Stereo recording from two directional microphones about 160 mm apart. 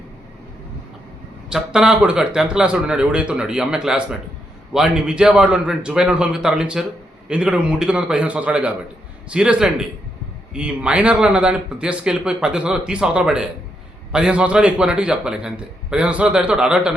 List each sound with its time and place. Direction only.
1.5 s a man's voice: 5° right (ahead or behind)